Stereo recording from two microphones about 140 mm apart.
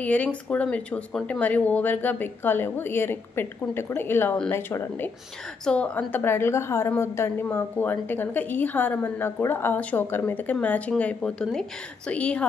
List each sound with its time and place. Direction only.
0.0 s a woman's voice: 10° left (ahead or behind)